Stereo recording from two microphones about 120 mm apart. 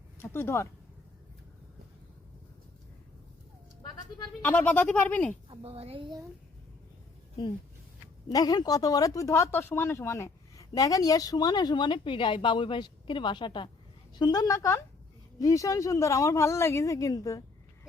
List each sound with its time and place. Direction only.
0.2 s speech: 20° left (ahead or behind)
4.4 s speech: 15° left (ahead or behind)
5.5 s a woman's voice: 55° right (ahead or behind)
8.3 s speech: 30° left (ahead or behind)